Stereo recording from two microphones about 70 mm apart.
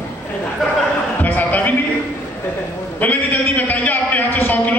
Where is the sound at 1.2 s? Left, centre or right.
Left.